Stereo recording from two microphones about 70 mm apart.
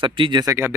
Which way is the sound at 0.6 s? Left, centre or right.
Right.